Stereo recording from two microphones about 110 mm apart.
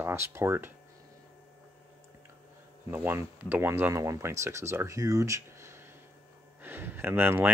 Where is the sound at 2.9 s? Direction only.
15° right (ahead or behind).